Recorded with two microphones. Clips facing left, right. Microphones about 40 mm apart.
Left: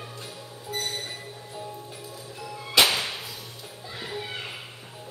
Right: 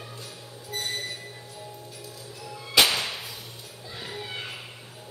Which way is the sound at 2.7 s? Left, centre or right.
Centre.